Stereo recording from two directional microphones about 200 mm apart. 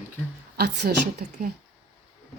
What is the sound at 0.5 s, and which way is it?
Speech, 50° right (ahead or behind).